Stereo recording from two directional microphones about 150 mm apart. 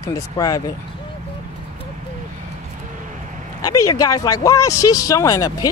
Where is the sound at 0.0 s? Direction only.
25° left (ahead or behind).